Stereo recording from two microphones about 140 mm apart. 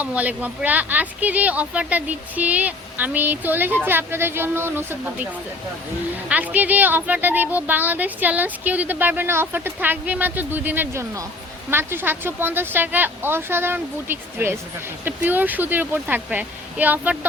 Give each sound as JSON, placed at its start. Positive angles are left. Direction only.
{"t": 0.0, "sound": "speech", "side_deg": -10}